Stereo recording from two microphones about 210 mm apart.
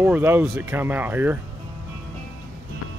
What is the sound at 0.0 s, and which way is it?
Speech, 10° right (ahead or behind).